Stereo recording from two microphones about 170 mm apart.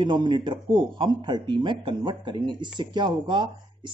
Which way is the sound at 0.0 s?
25° right (ahead or behind).